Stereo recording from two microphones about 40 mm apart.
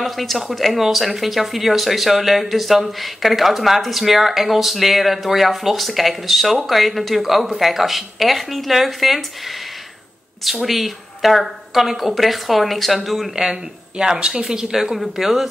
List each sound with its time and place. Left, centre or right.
0.0 s speech: centre
10.4 s speech: centre
13.4 s speech: centre